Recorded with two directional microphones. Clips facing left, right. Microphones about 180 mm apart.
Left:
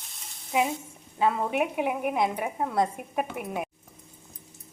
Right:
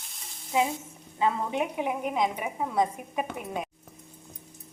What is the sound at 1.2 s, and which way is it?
Speech, 15° left (ahead or behind).